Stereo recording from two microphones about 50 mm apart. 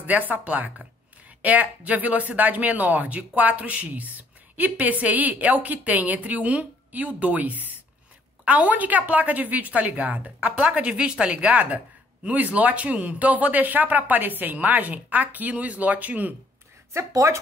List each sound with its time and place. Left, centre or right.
0.0 s speech: right
16.9 s speech: right